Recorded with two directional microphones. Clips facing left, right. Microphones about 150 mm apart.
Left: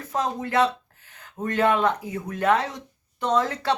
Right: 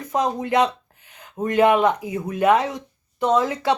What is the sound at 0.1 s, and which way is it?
Speech, 15° right (ahead or behind).